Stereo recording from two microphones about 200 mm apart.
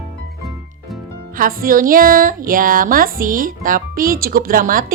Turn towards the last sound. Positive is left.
turn(degrees=-45)  # may be behind; listen again after turning